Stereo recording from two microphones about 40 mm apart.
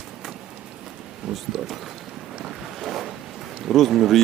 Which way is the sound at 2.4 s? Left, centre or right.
Centre.